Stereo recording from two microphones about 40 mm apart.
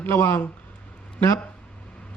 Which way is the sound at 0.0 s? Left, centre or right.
Left.